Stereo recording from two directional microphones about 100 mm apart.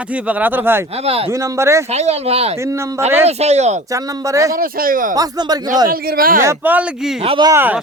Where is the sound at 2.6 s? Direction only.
30° right (ahead or behind).